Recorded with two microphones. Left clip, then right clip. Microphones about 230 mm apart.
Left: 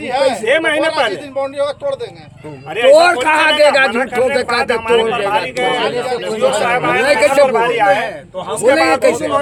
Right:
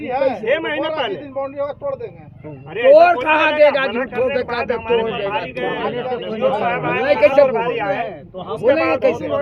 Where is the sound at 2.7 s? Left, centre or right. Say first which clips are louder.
Left 1 dB; left.